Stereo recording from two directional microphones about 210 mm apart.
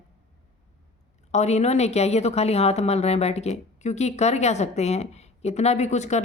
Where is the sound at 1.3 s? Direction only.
30° left (ahead or behind).